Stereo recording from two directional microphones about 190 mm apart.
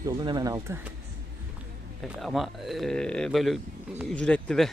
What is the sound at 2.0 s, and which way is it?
Speech, 5° right (ahead or behind).